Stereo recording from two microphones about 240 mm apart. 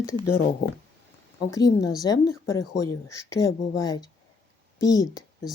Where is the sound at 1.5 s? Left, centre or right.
Centre.